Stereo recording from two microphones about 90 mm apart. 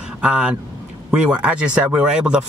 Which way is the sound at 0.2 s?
10° right (ahead or behind).